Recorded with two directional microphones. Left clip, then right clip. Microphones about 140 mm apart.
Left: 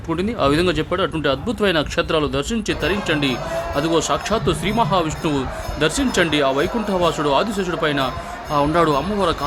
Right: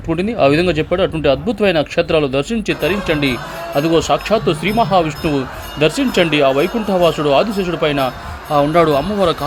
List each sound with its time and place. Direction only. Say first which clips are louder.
0.1 s speech: right 5 dB; 15° right (ahead or behind)